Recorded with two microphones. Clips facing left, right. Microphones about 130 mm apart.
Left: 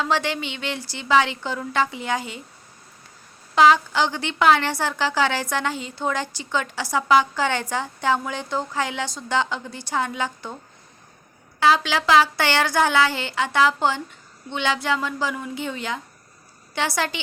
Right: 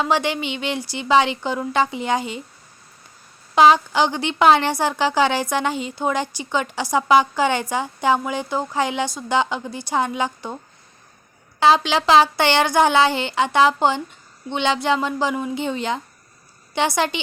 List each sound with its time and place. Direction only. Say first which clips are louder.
0.0 s speech: right 3 dB; 15° right (ahead or behind)
3.5 s a woman's voice: right 2 dB; 20° right (ahead or behind)
11.6 s speech: right 3 dB; 25° right (ahead or behind)